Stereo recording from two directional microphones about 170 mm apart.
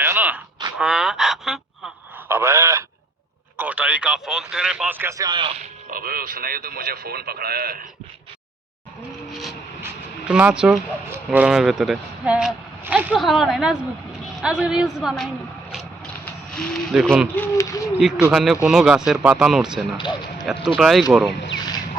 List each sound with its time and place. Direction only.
0.0 s a sound: 10° right (ahead or behind)
2.2 s a man's voice: 15° right (ahead or behind)
5.9 s speech: 60° right (ahead or behind)
9.8 s speech: 5° right (ahead or behind)
17.3 s a sound: 15° left (ahead or behind)
18.2 s speech: 5° right (ahead or behind)
20.0 s speech: 25° left (ahead or behind)
20.7 s speech: 5° right (ahead or behind)